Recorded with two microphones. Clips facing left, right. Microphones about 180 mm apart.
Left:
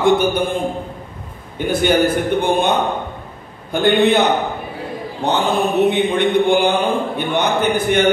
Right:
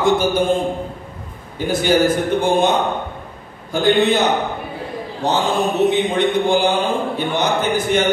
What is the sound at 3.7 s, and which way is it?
Speech, 60° left (ahead or behind).